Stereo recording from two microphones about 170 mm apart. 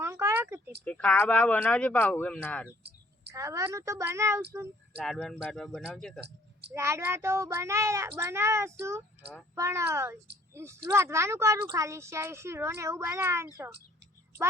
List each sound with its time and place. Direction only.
0.0 s a sound: 15° right (ahead or behind)
0.9 s speech: 10° left (ahead or behind)
3.3 s speech: 20° right (ahead or behind)
5.0 s speech: 5° left (ahead or behind)
6.2 s a sound: 80° right
6.7 s speech: 15° right (ahead or behind)